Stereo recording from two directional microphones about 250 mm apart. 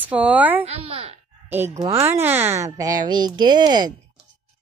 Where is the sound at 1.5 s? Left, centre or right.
Centre.